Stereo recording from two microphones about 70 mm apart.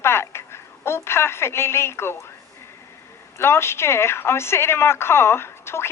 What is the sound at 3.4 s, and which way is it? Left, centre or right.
A woman's voice, left.